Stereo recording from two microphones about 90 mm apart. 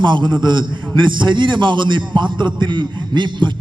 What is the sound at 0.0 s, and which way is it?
A man's voice, 60° right (ahead or behind).